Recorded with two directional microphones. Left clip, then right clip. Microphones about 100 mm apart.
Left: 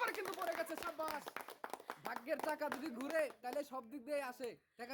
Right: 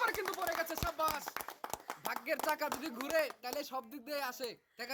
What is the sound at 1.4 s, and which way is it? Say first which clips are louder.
Clapping: right 5 dB; 25° right (ahead or behind).